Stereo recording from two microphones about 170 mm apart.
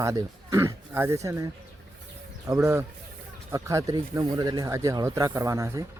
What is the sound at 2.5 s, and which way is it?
A man's voice, 15° right (ahead or behind).